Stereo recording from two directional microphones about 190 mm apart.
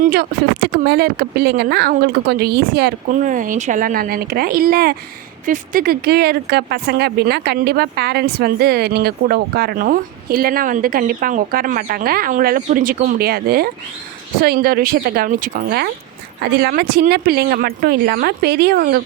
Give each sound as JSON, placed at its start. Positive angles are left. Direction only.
{"t": 0.0, "sound": "speech", "side_deg": -50}